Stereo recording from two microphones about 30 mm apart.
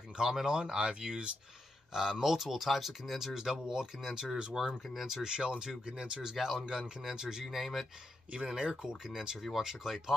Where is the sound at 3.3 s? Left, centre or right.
Centre.